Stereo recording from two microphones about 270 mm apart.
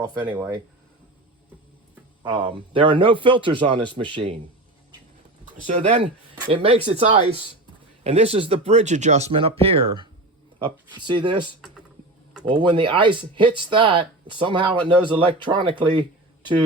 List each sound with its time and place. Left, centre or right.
0.3 s speech: centre
2.2 s speech: centre
5.6 s speech: right
8.0 s speech: right
12.5 s speech: centre